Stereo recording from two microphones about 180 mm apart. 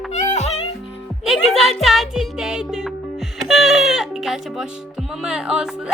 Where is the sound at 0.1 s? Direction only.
40° left (ahead or behind).